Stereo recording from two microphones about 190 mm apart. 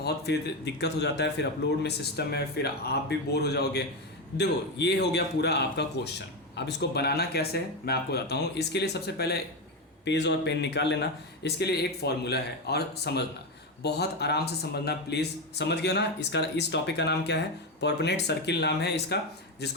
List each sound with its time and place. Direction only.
0.0 s speech: 60° left (ahead or behind)